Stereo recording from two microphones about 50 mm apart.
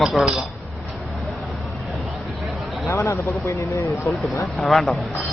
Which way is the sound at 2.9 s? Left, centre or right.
Left.